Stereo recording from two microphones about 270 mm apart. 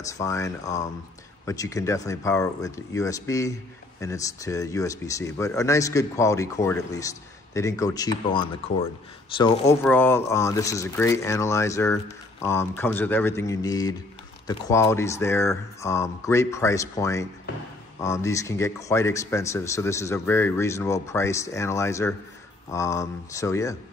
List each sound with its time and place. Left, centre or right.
0.2 s speech: centre
9.8 s speech: centre